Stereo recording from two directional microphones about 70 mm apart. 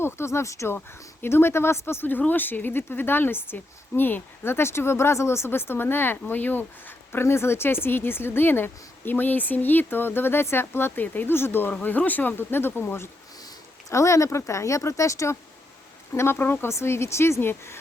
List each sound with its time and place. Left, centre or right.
0.0 s speech: left
1.2 s speech: left
13.9 s speech: left
16.1 s speech: left